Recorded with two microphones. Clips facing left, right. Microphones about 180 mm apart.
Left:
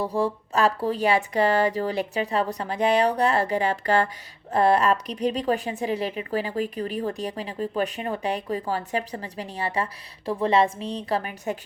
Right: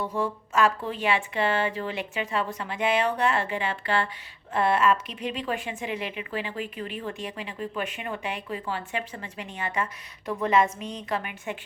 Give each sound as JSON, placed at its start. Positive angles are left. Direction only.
{"t": 0.0, "sound": "speech", "side_deg": 35}